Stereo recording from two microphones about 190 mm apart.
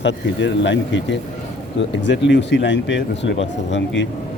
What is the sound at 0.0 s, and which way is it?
Speech, 70° left (ahead or behind).